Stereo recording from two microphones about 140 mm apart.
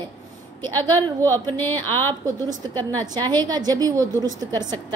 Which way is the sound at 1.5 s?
15° left (ahead or behind).